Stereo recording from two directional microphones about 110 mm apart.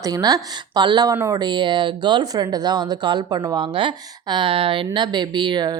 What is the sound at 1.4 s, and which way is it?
A woman's voice, 45° right (ahead or behind).